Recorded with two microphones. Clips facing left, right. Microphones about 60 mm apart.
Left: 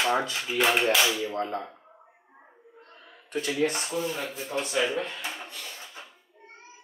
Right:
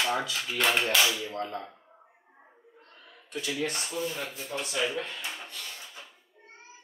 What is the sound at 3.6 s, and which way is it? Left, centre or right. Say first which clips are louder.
Dishes: left 5 dB; centre.